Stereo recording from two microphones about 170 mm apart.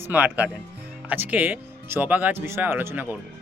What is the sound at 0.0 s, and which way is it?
Speech, 10° right (ahead or behind).